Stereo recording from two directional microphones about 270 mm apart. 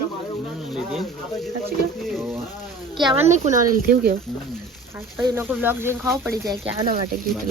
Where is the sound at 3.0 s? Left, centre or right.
Centre; by 4.1 s right.